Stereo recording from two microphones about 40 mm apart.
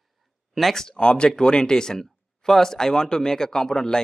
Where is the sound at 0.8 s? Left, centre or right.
Left.